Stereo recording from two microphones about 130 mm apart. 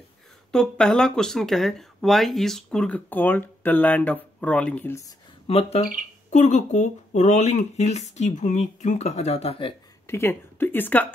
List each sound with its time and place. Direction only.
0.5 s speech: 5° left (ahead or behind)
5.5 s speech: 50° left (ahead or behind)
6.3 s speech: 65° left (ahead or behind); by 9.8 s 45° left (ahead or behind)
10.0 s speech: 20° left (ahead or behind)